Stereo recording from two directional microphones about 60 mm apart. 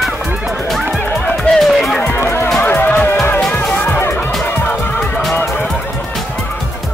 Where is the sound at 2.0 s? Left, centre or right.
Left.